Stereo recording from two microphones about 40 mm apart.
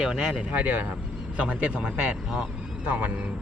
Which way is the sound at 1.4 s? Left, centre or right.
Right.